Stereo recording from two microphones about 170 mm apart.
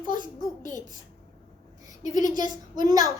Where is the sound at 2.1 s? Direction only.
20° right (ahead or behind).